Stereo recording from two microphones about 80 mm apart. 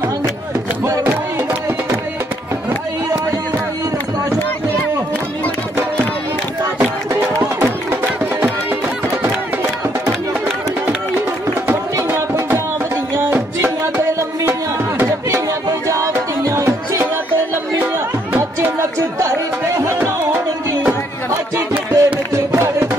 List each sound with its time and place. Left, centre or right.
7.3 s music: right
11.1 s music: right
18.8 s a sound: right
21.9 s music: right